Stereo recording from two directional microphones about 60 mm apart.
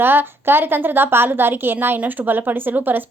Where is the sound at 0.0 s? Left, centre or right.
Right.